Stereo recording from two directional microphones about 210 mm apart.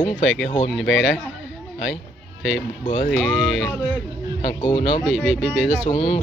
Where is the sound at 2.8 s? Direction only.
40° left (ahead or behind).